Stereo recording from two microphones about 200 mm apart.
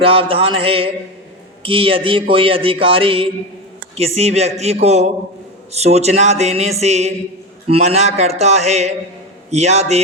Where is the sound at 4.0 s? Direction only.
30° right (ahead or behind).